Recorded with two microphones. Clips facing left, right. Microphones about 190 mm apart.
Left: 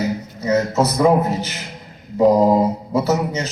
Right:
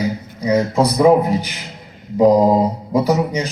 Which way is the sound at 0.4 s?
15° right (ahead or behind).